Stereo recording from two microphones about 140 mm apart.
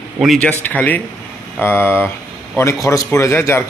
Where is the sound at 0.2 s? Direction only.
5° left (ahead or behind).